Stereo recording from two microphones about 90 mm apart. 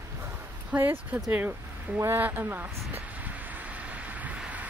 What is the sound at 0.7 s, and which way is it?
Speech, 20° right (ahead or behind).